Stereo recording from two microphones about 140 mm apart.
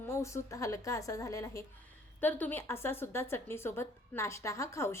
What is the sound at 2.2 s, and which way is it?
A woman's voice, 10° left (ahead or behind).